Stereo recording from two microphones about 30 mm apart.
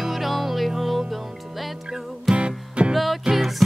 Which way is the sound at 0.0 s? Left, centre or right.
Centre.